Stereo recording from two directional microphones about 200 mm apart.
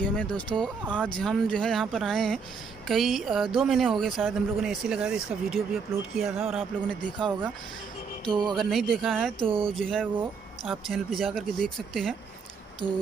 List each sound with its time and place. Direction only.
0.0 s speech: 5° left (ahead or behind)
0.8 s speech: 5° right (ahead or behind)
8.3 s speech: 20° right (ahead or behind)
8.5 s speech: centre (ahead or behind)
9.4 s speech: 25° right (ahead or behind)
9.8 s speech: centre (ahead or behind)
12.8 s speech: 25° right (ahead or behind)